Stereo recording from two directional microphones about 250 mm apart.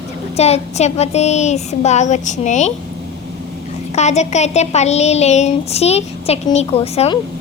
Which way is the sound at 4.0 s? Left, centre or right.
Left.